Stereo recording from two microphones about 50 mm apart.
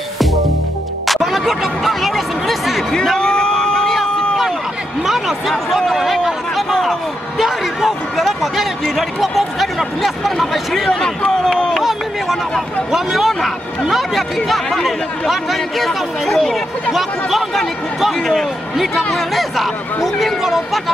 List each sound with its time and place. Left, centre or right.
1.0 s music: centre
3.2 s a sound: centre
5.0 s a sound: centre
8.9 s speech: centre
11.8 s speech: centre
16.9 s speech: centre